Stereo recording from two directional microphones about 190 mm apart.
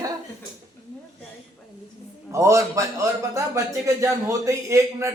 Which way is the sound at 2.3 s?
15° right (ahead or behind).